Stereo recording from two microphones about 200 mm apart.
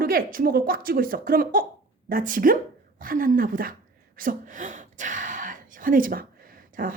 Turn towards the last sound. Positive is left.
turn(degrees=-45)  # may be behind; listen again after turning